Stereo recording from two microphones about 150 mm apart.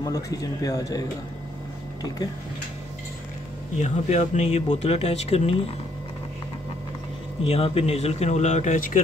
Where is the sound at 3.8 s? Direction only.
50° left (ahead or behind).